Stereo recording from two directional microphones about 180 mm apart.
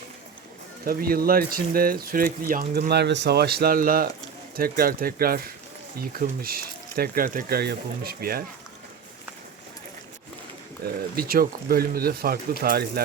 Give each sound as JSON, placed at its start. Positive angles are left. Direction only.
{"t": 0.9, "sound": "speech", "side_deg": -55}
{"t": 11.2, "sound": "speech", "side_deg": -55}